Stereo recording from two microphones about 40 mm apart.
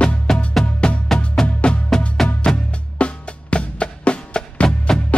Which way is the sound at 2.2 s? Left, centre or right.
Left.